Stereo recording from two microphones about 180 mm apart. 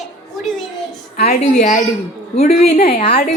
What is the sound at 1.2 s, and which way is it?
Speech, 45° left (ahead or behind).